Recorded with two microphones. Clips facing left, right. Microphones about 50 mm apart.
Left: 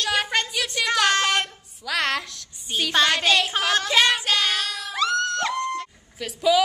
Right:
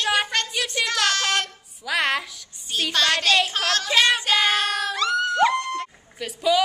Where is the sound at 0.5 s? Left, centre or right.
Centre.